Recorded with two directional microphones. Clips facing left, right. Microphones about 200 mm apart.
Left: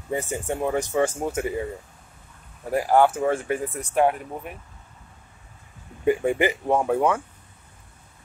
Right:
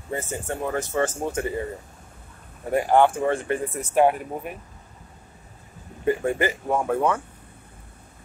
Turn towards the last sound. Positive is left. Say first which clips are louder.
# left 1 dB
turn(degrees=10)  # may be behind; listen again after turning